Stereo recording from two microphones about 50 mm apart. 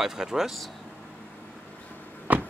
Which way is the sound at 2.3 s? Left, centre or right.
Right.